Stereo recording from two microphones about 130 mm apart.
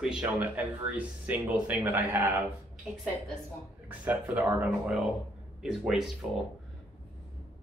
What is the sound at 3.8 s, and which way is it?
Speech, 15° right (ahead or behind).